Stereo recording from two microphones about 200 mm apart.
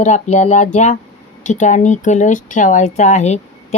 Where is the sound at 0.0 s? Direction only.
35° left (ahead or behind).